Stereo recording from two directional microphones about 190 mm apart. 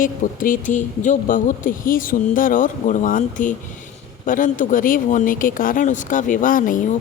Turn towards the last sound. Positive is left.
turn(degrees=45)  # may be behind; listen again after turning